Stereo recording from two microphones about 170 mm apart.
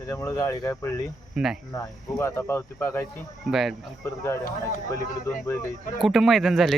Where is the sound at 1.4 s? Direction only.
5° right (ahead or behind).